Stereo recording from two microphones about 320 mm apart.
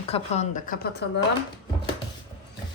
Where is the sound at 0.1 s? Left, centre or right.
Left.